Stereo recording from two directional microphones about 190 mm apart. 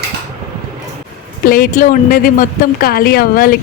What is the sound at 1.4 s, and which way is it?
A woman's voice, 50° left (ahead or behind).